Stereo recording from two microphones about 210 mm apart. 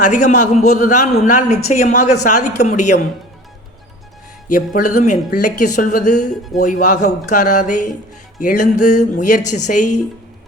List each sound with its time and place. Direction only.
0.0 s speech: 35° left (ahead or behind)
4.5 s speech: 40° left (ahead or behind)